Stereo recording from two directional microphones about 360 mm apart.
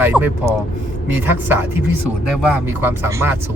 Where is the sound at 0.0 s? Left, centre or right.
Centre.